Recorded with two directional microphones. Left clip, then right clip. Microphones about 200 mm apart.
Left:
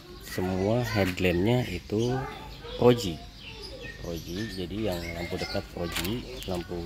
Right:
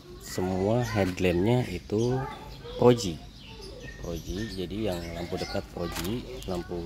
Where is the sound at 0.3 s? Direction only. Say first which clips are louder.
Even; centre (ahead or behind).